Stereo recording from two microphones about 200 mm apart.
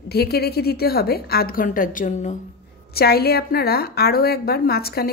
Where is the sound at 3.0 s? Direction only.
50° left (ahead or behind).